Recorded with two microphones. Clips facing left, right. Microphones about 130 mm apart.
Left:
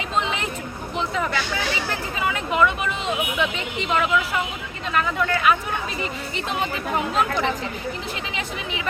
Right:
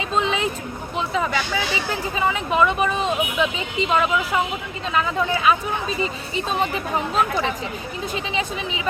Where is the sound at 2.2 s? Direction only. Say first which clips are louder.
Right 1 dB; 25° right (ahead or behind).